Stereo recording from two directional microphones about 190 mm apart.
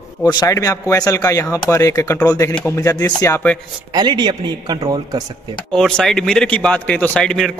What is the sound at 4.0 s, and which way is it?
A man's voice, 25° right (ahead or behind).